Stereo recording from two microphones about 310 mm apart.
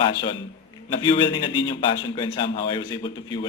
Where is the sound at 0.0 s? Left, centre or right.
Centre.